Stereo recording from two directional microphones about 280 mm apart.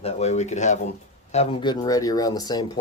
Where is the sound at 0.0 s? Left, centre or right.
Left.